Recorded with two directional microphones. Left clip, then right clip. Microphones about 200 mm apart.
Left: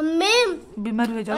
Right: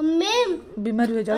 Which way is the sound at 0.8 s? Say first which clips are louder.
Right 5 dB; centre (ahead or behind).